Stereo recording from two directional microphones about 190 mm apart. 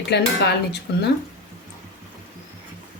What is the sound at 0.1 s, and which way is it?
A woman's voice, 60° left (ahead or behind).